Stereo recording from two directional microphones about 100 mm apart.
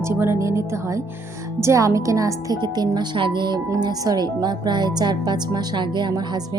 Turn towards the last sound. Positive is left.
turn(degrees=-50)  # may be behind; listen again after turning